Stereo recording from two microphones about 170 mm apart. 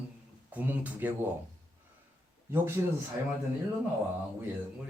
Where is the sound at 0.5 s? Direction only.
10° right (ahead or behind).